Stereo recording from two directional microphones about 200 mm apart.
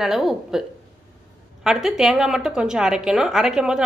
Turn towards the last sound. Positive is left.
turn(degrees=-5)  # may be behind; listen again after turning